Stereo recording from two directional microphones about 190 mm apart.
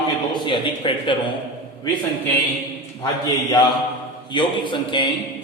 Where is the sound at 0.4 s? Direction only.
25° left (ahead or behind).